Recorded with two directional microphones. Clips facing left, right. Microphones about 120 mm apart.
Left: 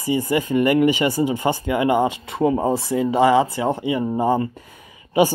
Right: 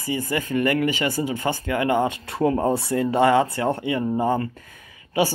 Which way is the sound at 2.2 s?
Centre (ahead or behind).